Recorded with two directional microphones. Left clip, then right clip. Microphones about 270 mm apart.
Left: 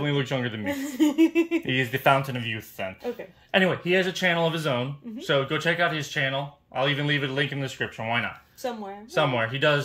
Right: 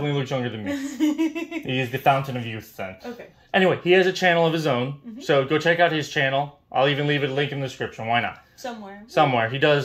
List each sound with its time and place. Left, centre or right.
0.0 s speech: centre
0.9 s a sound: left
1.7 s speech: centre